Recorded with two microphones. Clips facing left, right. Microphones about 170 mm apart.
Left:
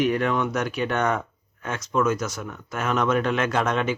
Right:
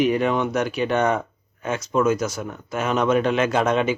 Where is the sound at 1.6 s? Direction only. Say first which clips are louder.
Right 3 dB; 5° right (ahead or behind).